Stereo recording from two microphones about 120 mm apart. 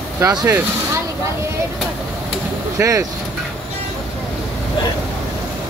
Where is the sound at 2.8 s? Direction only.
25° right (ahead or behind).